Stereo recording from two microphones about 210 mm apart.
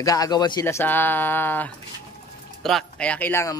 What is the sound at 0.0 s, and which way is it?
Speech, 15° left (ahead or behind).